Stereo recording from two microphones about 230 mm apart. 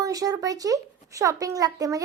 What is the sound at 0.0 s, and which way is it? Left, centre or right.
A woman's voice, centre.